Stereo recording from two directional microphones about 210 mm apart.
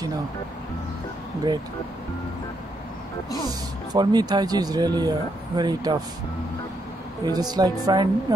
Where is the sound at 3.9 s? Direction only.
20° right (ahead or behind).